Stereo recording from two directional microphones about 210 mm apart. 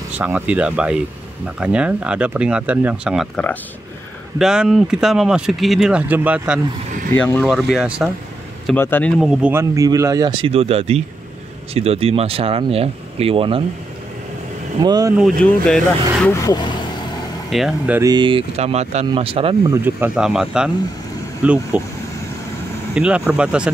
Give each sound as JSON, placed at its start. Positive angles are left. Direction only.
{"t": 0.2, "sound": "speech", "side_deg": -5}
{"t": 7.2, "sound": "speech", "side_deg": 5}
{"t": 8.6, "sound": "speech", "side_deg": 10}
{"t": 9.2, "sound": "speech", "side_deg": -5}
{"t": 14.8, "sound": "speech", "side_deg": -20}
{"t": 15.1, "sound": "speech", "side_deg": 0}
{"t": 16.3, "sound": "speech", "side_deg": 15}
{"t": 17.5, "sound": "speech", "side_deg": 0}
{"t": 18.0, "sound": "speech", "side_deg": -20}
{"t": 19.7, "sound": "speech", "side_deg": -10}
{"t": 22.9, "sound": "speech", "side_deg": -5}